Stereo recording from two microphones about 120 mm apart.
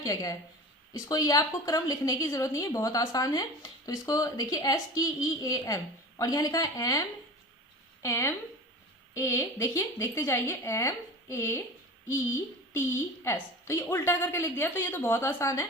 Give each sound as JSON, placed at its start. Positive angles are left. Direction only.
{"t": 0.0, "sound": "a woman's voice", "side_deg": 30}
{"t": 8.0, "sound": "a woman's voice", "side_deg": 25}